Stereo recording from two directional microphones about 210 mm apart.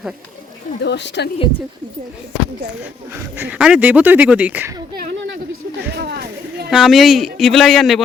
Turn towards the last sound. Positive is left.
turn(degrees=0)  # may be behind; listen again after turning